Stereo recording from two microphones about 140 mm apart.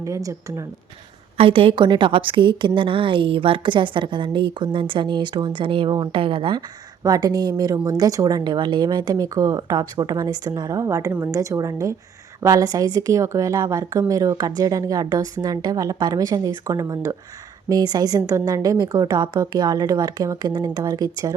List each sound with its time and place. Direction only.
0.0 s a woman's voice: 25° right (ahead or behind)
1.4 s a woman's voice: 40° right (ahead or behind)
7.0 s a woman's voice: 25° right (ahead or behind)